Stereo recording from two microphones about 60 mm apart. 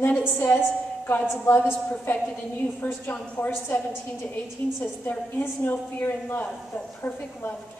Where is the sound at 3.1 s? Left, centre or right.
Left.